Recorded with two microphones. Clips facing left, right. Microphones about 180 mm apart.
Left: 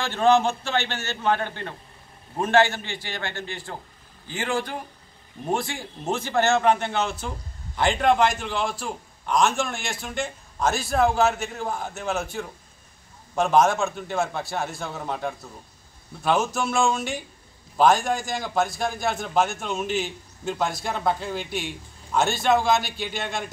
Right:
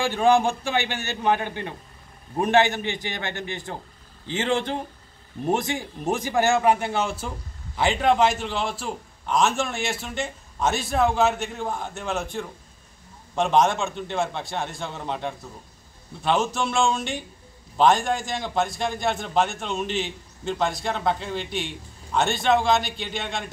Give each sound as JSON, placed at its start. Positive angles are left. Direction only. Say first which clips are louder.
{"t": 0.0, "sound": "a man's voice", "louder": "even", "side_deg": -10}